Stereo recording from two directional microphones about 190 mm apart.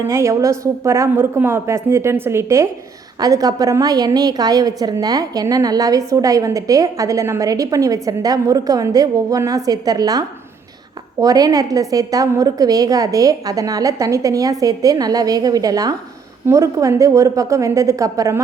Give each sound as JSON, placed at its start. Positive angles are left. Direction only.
{"t": 0.1, "sound": "a woman's voice", "side_deg": -15}